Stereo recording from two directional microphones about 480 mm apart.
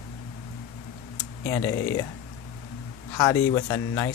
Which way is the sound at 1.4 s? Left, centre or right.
Centre.